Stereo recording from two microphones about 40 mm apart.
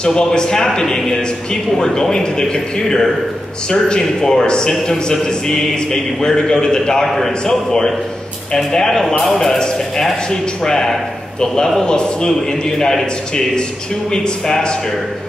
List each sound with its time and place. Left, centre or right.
0.0 s a man's voice: centre